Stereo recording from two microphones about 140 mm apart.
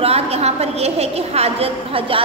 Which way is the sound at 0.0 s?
45° right (ahead or behind).